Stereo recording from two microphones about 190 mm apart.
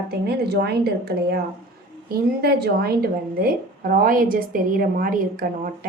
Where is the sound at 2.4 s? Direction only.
55° right (ahead or behind).